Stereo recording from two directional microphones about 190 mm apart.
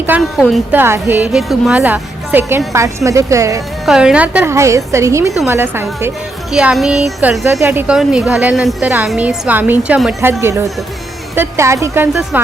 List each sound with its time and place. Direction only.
0.2 s a woman's voice: centre (ahead or behind); by 3.6 s 15° right (ahead or behind)
3.8 s a woman's voice: 5° right (ahead or behind)